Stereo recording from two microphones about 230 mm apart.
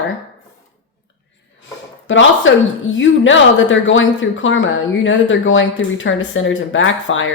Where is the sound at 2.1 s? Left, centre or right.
Left.